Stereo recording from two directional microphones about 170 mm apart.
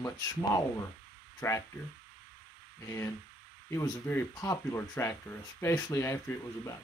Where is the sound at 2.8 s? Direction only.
15° left (ahead or behind).